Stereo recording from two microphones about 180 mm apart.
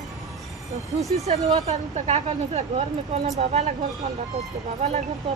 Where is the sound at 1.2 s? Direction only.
40° right (ahead or behind).